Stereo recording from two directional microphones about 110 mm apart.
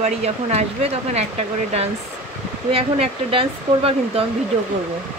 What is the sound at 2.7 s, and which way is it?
Speech, 60° right (ahead or behind).